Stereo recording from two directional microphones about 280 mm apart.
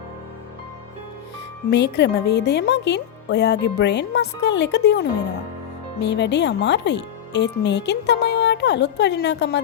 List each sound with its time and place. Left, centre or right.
1.7 s speech: left